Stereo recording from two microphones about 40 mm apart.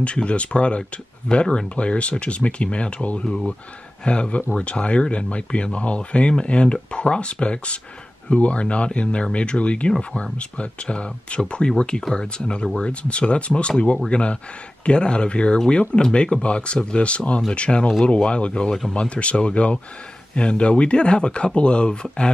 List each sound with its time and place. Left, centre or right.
0.0 s speech: left